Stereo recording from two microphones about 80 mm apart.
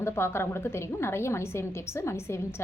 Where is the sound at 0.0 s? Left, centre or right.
Left.